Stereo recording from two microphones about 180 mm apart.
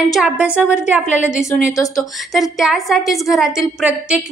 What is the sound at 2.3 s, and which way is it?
A woman's voice, centre (ahead or behind).